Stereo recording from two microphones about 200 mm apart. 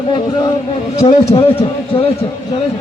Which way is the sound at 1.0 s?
30° left (ahead or behind).